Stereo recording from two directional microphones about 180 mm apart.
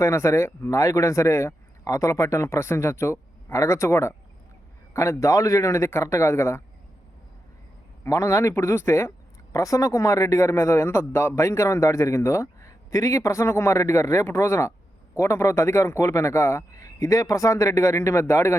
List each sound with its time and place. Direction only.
0.0 s speech: 15° left (ahead or behind)
8.0 s speech: 15° left (ahead or behind)